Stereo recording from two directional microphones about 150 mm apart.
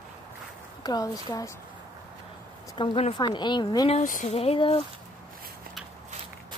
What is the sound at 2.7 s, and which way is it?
Speech, 35° left (ahead or behind).